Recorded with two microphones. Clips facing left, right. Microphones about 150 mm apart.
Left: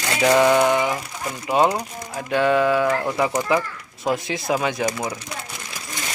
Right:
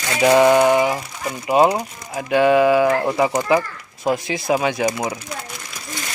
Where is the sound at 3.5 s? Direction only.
Centre (ahead or behind).